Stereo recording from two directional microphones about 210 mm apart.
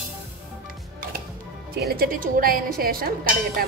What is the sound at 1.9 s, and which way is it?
A woman's voice, 45° right (ahead or behind).